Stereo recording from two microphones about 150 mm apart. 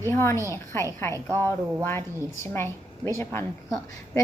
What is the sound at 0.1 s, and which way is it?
Speech, 15° left (ahead or behind).